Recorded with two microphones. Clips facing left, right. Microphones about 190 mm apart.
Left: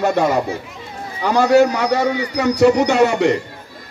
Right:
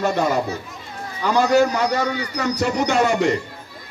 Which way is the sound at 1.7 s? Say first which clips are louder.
Left 3 dB; 65° left (ahead or behind).